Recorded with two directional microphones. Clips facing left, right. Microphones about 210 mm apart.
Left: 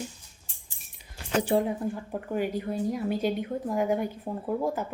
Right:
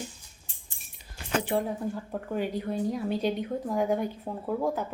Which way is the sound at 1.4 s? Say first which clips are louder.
Left 4 dB; 35° left (ahead or behind).